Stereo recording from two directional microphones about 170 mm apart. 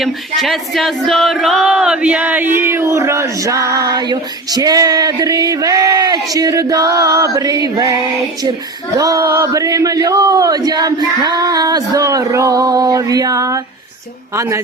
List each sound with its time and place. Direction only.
0.0 s speech: centre (ahead or behind); by 14.6 s 15° right (ahead or behind)